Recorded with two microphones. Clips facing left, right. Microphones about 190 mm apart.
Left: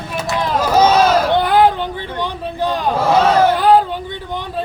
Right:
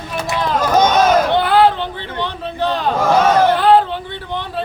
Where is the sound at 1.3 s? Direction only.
15° left (ahead or behind).